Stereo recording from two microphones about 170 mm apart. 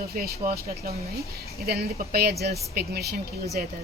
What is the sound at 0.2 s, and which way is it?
Speech, 60° right (ahead or behind).